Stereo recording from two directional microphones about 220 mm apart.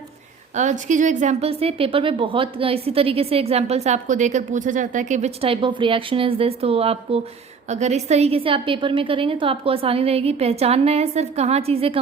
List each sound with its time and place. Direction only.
0.5 s a woman's voice: 35° right (ahead or behind)